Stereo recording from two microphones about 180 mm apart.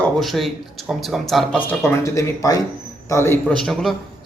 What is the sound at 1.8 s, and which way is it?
Speech, 15° left (ahead or behind).